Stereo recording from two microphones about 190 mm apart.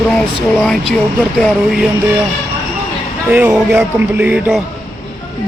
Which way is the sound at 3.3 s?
10° right (ahead or behind).